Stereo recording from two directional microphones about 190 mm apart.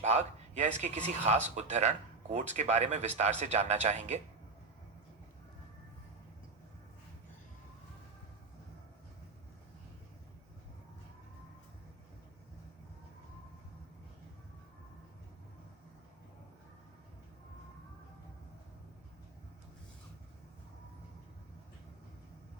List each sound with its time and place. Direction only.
0.0 s speech: 35° right (ahead or behind)